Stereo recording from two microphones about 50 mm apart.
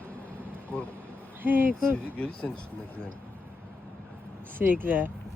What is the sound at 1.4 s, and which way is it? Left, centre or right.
Speech, right.